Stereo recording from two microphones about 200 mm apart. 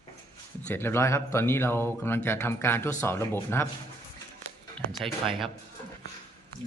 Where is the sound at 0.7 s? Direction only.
10° left (ahead or behind).